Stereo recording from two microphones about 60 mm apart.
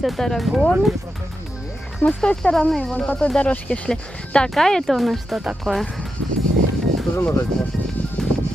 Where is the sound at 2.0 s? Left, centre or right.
Left.